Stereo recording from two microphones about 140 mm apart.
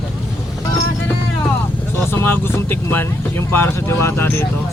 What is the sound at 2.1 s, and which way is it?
Vehicle, 15° left (ahead or behind).